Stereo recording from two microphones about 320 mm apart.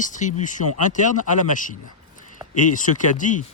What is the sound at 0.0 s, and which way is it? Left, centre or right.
Speech, left.